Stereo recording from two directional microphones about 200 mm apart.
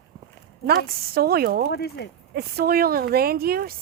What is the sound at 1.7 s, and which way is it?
Speech, 55° left (ahead or behind).